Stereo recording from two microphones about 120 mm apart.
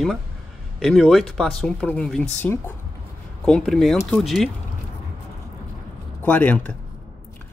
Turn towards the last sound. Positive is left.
turn(degrees=10)  # may be behind; listen again after turning